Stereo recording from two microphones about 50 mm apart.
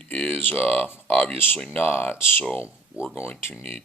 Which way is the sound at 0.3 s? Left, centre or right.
Left.